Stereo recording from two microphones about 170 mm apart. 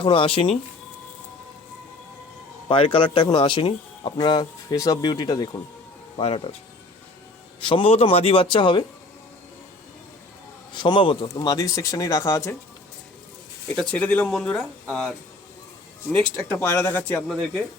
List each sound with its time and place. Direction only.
0.0 s speech: 30° left (ahead or behind)
2.6 s speech: 30° left (ahead or behind)
6.1 s speech: 35° left (ahead or behind)
7.6 s speech: 30° left (ahead or behind)
10.7 s speech: 25° left (ahead or behind)
13.7 s speech: 10° left (ahead or behind)
16.5 s speech: 10° left (ahead or behind)